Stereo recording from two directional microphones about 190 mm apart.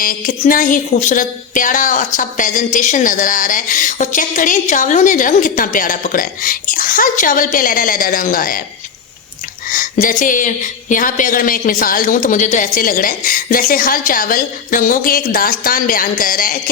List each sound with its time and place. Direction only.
0.0 s a woman's voice: 45° left (ahead or behind)
9.6 s a woman's voice: 45° left (ahead or behind)